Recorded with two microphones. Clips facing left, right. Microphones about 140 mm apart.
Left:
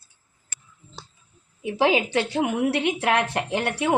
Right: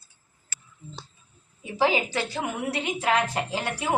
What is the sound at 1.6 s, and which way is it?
A woman's voice, 65° left (ahead or behind).